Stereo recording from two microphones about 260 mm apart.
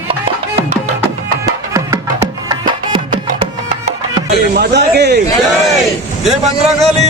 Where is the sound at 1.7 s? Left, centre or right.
Centre.